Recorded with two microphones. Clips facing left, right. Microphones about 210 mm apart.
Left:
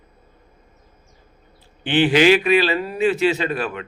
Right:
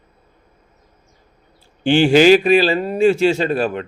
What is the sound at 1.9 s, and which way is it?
Speech, 45° right (ahead or behind).